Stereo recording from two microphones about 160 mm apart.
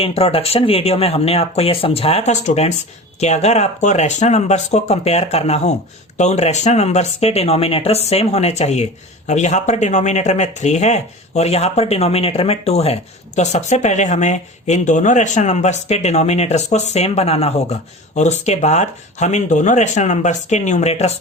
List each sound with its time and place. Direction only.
0.0 s speech: 40° left (ahead or behind)